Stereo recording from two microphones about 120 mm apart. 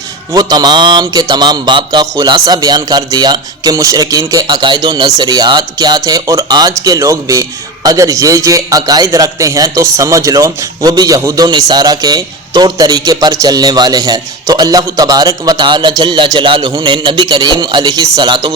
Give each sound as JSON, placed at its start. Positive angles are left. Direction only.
{"t": 0.3, "sound": "a man's voice", "side_deg": -35}